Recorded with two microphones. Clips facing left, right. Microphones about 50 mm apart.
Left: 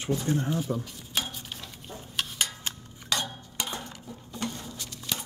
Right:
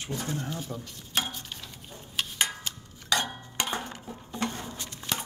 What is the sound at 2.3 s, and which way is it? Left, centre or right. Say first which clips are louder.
Tick-tock: right 2 dB; right.